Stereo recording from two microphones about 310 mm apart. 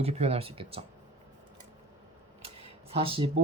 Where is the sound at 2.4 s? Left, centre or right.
Centre.